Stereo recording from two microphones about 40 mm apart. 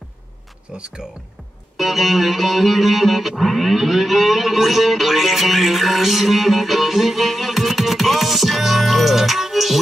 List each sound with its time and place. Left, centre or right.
0.7 s speech: right
1.8 s music: centre